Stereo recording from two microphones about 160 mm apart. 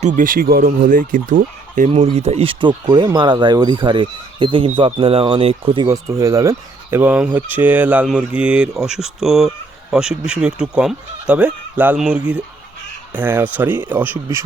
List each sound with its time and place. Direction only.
0.0 s speech: 55° right (ahead or behind)
1.9 s speech: 40° right (ahead or behind); by 14.4 s 15° right (ahead or behind)